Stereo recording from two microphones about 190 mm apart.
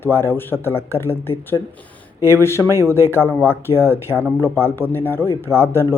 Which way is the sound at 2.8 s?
15° left (ahead or behind).